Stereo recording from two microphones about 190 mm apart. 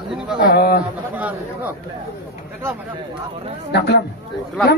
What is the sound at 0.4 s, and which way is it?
Speech, 55° left (ahead or behind).